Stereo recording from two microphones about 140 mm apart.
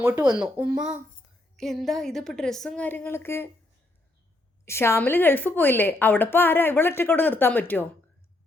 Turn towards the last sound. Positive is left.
turn(degrees=15)  # may be behind; listen again after turning